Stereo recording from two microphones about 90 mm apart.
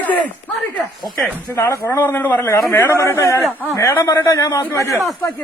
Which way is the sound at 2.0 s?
25° left (ahead or behind).